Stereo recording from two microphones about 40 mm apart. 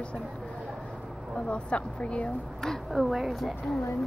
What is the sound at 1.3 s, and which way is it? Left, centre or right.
Speech, left.